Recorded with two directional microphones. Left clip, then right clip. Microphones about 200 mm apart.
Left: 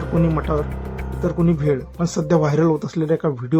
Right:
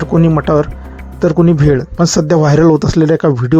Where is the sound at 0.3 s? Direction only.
35° right (ahead or behind).